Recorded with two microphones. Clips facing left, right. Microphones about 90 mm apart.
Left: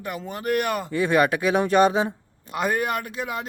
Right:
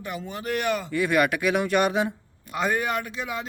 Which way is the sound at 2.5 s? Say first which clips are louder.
Left 1 dB; 50° left (ahead or behind).